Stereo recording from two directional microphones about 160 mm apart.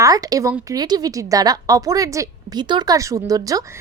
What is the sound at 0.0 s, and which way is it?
Speech, 20° right (ahead or behind).